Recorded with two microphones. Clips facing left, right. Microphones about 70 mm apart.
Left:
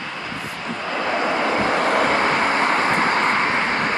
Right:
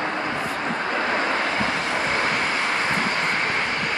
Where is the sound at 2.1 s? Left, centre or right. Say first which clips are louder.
Left 4 dB; left.